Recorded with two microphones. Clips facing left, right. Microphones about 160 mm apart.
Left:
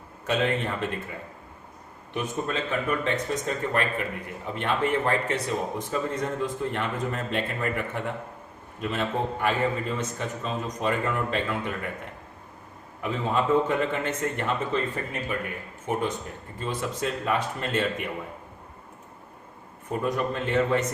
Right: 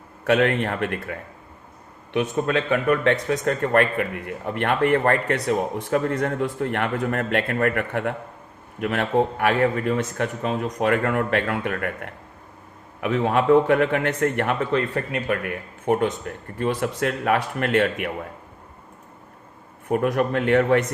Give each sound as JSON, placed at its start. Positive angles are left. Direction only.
{"t": 0.3, "sound": "speech", "side_deg": -65}
{"t": 2.1, "sound": "speech", "side_deg": -70}
{"t": 19.9, "sound": "speech", "side_deg": -65}